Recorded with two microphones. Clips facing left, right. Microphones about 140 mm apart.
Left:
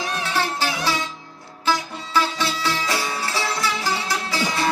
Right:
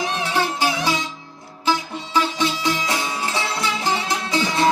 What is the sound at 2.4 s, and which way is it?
Music, 15° right (ahead or behind).